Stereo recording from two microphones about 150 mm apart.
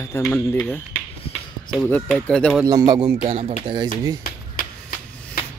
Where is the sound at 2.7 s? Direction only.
25° right (ahead or behind).